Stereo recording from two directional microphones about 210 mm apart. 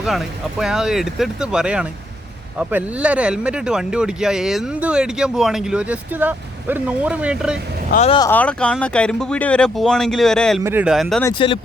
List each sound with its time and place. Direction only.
0.0 s speech: centre (ahead or behind)
7.9 s speech: 35° left (ahead or behind)
8.3 s speech: 5° left (ahead or behind)
10.6 s speech: 10° right (ahead or behind)
11.3 s speech: 25° left (ahead or behind)